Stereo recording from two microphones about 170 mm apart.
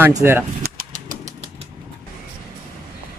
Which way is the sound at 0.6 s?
60° right (ahead or behind).